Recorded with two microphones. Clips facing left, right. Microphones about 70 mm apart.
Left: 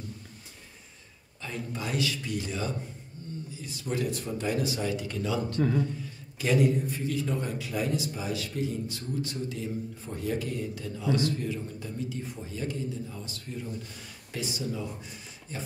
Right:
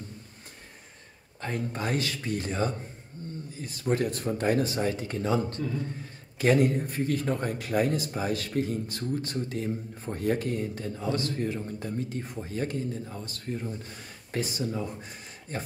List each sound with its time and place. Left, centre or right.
1.4 s a man's voice: right
3.2 s a sound: right
3.5 s a man's voice: right